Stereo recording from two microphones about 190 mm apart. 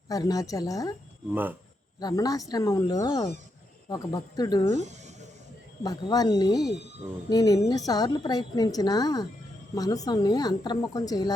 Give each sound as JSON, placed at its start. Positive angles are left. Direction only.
{"t": 0.1, "sound": "a woman's voice", "side_deg": 20}
{"t": 1.3, "sound": "speech", "side_deg": -10}
{"t": 2.0, "sound": "a woman's voice", "side_deg": 20}
{"t": 4.8, "sound": "a sound", "side_deg": -35}
{"t": 5.8, "sound": "a woman's voice", "side_deg": 20}